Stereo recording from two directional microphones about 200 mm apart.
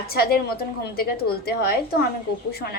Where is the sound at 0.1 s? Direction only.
50° left (ahead or behind).